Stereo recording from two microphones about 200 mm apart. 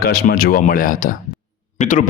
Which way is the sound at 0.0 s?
50° left (ahead or behind).